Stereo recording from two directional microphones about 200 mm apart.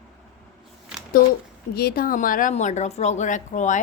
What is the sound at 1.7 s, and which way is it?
A woman's voice, 50° left (ahead or behind).